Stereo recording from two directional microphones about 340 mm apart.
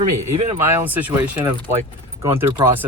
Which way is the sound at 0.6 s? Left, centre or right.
Centre.